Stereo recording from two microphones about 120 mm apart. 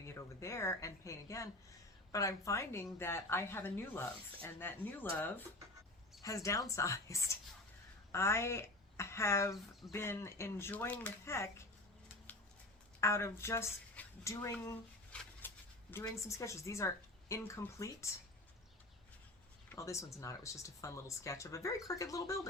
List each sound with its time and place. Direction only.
0.0 s a woman's voice: 25° left (ahead or behind)
6.2 s a woman's voice: 25° left (ahead or behind)
11.3 s a woman's voice: 25° left (ahead or behind)
12.3 s a sound: 15° left (ahead or behind)
13.0 s a woman's voice: 25° left (ahead or behind)
19.7 s a woman's voice: 25° left (ahead or behind)